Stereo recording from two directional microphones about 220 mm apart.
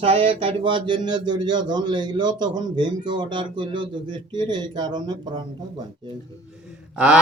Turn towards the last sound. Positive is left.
turn(degrees=-5)  # may be behind; listen again after turning